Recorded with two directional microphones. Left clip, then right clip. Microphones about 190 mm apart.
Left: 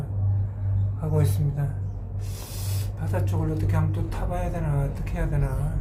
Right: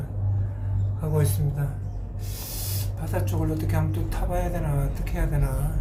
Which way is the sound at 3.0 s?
5° left (ahead or behind).